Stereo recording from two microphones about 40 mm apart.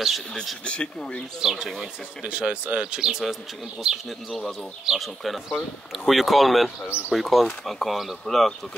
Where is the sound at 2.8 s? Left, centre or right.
Centre.